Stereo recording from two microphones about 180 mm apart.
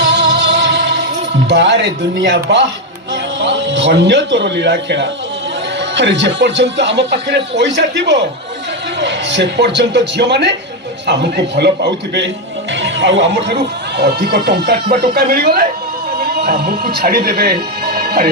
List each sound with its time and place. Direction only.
0.1 s music: 75° right (ahead or behind)
1.5 s a man's voice: 75° right (ahead or behind)
12.8 s speech: 85° right; by 18.3 s 60° right (ahead or behind)